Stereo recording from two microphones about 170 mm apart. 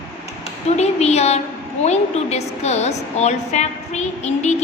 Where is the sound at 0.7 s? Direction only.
40° left (ahead or behind).